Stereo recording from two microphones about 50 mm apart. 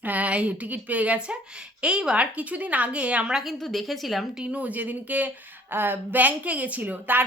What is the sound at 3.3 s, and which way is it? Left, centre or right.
A woman's voice, centre.